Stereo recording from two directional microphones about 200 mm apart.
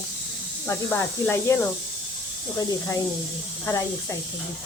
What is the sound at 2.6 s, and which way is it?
Speech, 15° left (ahead or behind).